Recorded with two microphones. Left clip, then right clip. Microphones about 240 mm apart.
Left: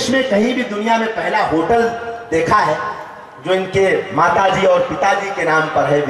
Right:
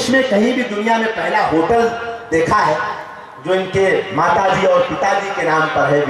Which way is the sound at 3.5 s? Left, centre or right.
Centre.